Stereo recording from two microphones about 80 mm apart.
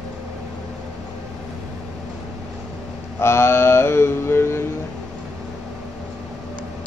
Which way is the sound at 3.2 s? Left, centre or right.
Left.